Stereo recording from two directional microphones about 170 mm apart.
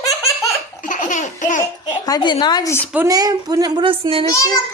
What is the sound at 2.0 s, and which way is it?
Speech, 25° left (ahead or behind).